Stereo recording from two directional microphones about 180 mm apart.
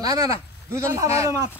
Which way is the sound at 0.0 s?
20° right (ahead or behind).